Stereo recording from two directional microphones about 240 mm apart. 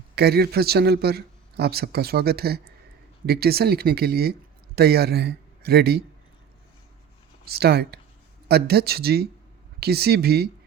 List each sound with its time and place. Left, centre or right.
0.2 s a man's voice: right
7.4 s a man's voice: right